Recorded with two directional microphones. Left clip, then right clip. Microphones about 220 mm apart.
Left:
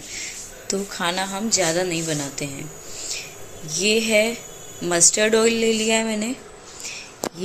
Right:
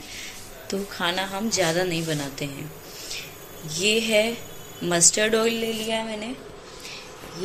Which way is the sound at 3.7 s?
5° left (ahead or behind).